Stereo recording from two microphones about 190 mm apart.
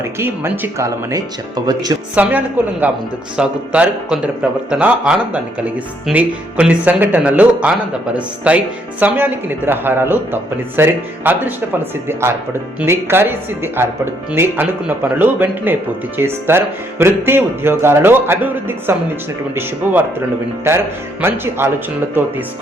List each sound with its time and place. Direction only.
0.2 s speech: 10° right (ahead or behind)
2.2 s speech: 10° right (ahead or behind)